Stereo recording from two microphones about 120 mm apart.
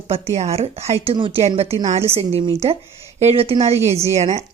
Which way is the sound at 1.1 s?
50° right (ahead or behind).